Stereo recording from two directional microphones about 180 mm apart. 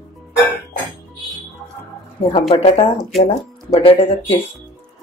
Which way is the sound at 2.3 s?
30° left (ahead or behind).